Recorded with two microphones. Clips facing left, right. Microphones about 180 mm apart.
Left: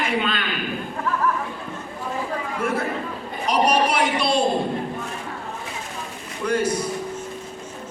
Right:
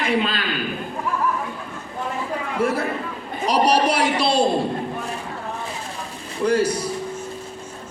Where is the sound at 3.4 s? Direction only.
35° right (ahead or behind).